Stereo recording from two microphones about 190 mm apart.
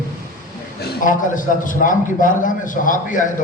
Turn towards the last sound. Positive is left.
turn(degrees=45)  # may be behind; listen again after turning